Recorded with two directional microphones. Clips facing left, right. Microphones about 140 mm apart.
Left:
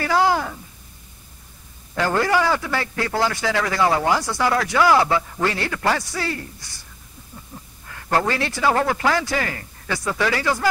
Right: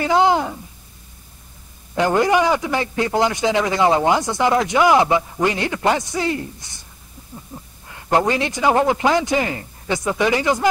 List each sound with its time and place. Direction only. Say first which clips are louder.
0.0 s a man's voice: right 3 dB; 20° right (ahead or behind)
2.0 s a man's voice: right 3 dB; 20° right (ahead or behind)
7.5 s a sound: right 3 dB; 20° right (ahead or behind)
7.9 s a man's voice: right 3 dB; 20° right (ahead or behind)